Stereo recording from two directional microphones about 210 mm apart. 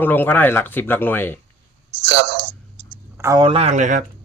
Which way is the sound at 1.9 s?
55° right (ahead or behind).